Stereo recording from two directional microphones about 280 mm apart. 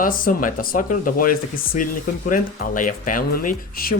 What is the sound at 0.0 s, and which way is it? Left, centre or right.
Speech, left.